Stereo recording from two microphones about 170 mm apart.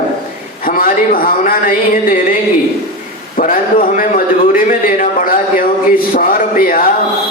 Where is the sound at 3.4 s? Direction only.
55° left (ahead or behind).